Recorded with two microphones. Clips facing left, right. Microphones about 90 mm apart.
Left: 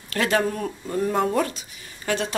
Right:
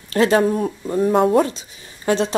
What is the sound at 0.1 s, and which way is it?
Speech, 30° right (ahead or behind).